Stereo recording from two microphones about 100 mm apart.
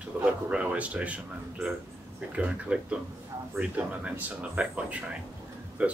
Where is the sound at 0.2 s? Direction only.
10° right (ahead or behind).